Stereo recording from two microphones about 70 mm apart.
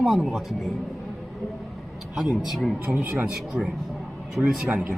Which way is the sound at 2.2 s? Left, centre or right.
Centre.